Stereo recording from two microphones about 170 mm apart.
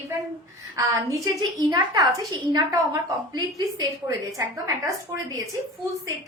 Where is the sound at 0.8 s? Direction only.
20° right (ahead or behind).